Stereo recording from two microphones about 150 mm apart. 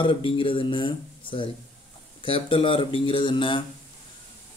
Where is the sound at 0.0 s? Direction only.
35° left (ahead or behind).